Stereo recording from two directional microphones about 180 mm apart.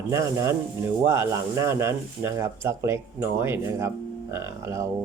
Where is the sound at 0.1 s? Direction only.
15° right (ahead or behind).